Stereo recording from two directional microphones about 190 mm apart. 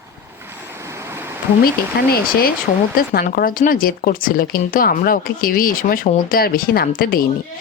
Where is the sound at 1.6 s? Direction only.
55° left (ahead or behind).